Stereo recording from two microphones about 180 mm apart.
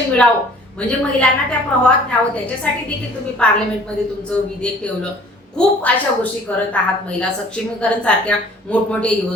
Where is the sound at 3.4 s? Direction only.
5° left (ahead or behind).